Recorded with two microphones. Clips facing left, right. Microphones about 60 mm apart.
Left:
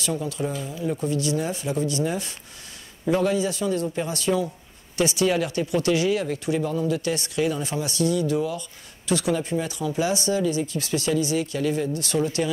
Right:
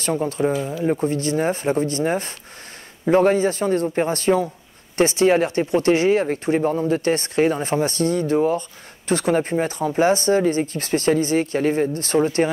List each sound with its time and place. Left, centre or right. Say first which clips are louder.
0.0 s speech: right 6 dB; right